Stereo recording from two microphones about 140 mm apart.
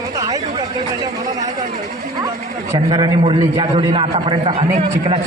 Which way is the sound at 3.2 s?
40° right (ahead or behind).